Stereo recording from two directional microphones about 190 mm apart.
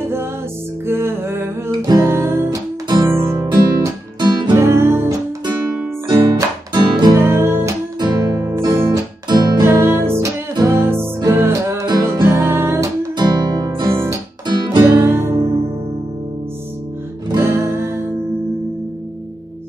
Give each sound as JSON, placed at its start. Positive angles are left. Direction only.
{"t": 0.0, "sound": "music", "side_deg": -15}
{"t": 1.8, "sound": "guitar", "side_deg": -15}
{"t": 3.8, "sound": "music", "side_deg": -25}
{"t": 13.2, "sound": "guitar", "side_deg": -20}
{"t": 17.3, "sound": "music", "side_deg": -15}